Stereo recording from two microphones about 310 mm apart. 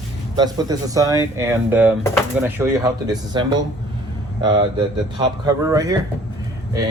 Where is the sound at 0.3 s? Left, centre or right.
Centre.